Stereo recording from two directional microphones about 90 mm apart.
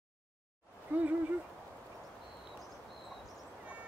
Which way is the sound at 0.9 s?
20° right (ahead or behind).